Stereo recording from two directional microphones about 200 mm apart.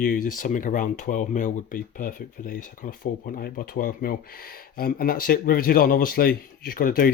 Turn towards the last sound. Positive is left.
turn(degrees=45)  # may be behind; listen again after turning